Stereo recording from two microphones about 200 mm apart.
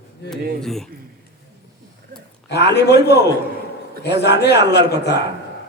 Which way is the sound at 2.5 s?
55° left (ahead or behind).